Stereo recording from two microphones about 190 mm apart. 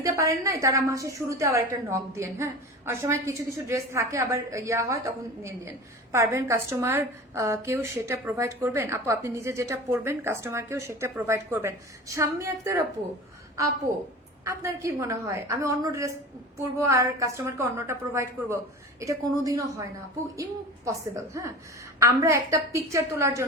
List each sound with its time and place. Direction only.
0.2 s a woman's voice: 15° right (ahead or behind)
6.1 s a woman's voice: 15° right (ahead or behind)
14.4 s a woman's voice: 15° right (ahead or behind)
22.0 s a woman's voice: 15° right (ahead or behind)